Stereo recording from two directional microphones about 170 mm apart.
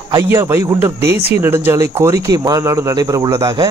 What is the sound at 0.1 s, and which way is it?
Speech, 15° right (ahead or behind).